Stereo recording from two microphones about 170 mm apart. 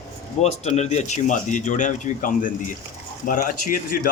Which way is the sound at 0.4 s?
40° left (ahead or behind).